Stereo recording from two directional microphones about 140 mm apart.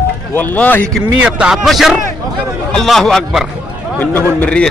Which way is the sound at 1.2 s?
5° right (ahead or behind).